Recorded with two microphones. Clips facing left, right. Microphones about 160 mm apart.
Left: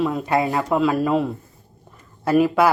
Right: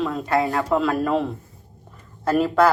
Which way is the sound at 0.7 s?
Centre (ahead or behind).